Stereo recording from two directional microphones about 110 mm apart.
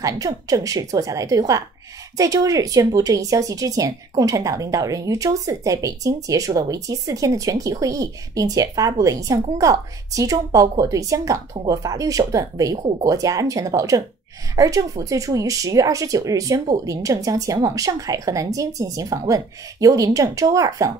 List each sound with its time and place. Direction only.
0.0 s speech: 30° right (ahead or behind)